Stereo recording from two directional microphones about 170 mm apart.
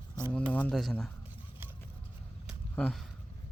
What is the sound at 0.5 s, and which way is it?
Speech, 5° left (ahead or behind).